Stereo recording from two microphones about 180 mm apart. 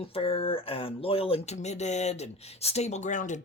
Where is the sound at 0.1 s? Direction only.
30° left (ahead or behind).